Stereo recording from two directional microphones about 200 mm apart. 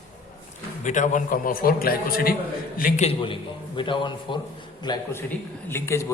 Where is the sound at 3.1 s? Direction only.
25° left (ahead or behind).